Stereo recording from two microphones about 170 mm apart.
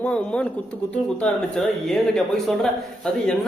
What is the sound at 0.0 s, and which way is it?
Speech, 5° left (ahead or behind).